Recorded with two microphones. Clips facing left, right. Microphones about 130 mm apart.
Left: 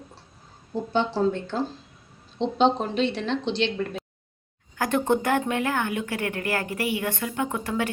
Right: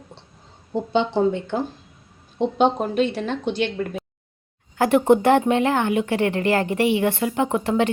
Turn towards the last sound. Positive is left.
turn(degrees=-25)  # may be behind; listen again after turning